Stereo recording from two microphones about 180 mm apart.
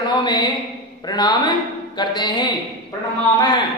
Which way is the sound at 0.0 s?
25° left (ahead or behind).